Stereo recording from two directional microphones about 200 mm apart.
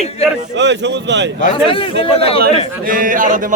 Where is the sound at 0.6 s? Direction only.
60° right (ahead or behind).